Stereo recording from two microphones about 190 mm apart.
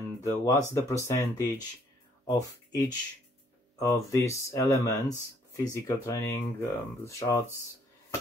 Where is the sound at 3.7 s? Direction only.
15° left (ahead or behind).